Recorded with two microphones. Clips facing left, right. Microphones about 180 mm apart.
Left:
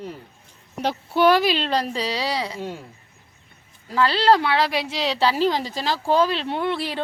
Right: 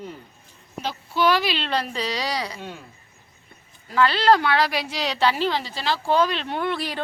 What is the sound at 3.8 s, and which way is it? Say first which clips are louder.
A woman's voice: even; 30° left (ahead or behind).